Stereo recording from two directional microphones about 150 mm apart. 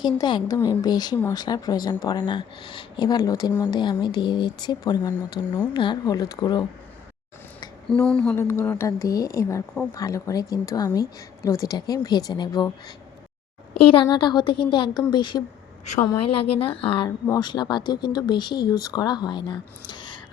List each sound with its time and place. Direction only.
0.0 s speech: 30° left (ahead or behind)
5.5 s speech: 15° left (ahead or behind)
5.7 s speech: 30° left (ahead or behind)
7.9 s speech: 5° left (ahead or behind)
8.4 s speech: 15° left (ahead or behind)
13.9 s a woman's voice: 30° left (ahead or behind)
17.2 s speech: 25° left (ahead or behind)